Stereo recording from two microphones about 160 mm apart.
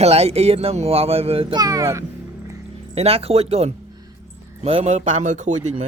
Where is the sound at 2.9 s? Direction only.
40° right (ahead or behind).